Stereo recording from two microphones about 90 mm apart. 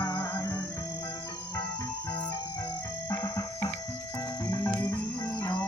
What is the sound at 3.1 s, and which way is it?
Music, 35° left (ahead or behind).